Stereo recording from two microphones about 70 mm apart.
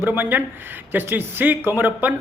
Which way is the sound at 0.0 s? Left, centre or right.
Right.